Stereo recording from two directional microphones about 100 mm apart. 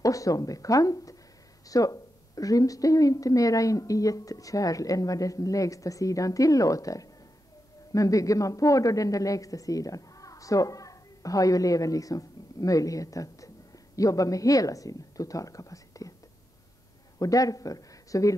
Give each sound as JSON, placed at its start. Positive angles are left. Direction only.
{"t": 0.0, "sound": "speech", "side_deg": 35}
{"t": 17.2, "sound": "speech", "side_deg": 35}